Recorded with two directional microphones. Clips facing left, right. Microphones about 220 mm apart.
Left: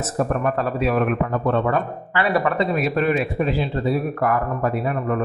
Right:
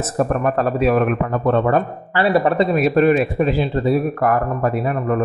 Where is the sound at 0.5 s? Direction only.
45° right (ahead or behind).